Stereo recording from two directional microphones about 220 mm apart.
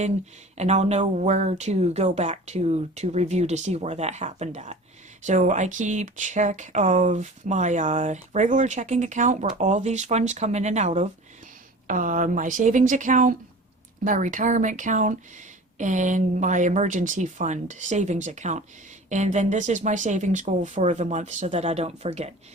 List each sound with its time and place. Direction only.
0.5 s speech: 30° right (ahead or behind)